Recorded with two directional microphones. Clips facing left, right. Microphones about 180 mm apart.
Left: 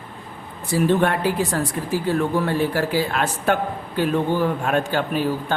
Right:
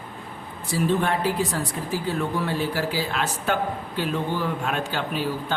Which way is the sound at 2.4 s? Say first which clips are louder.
Left 4 dB; 55° left (ahead or behind).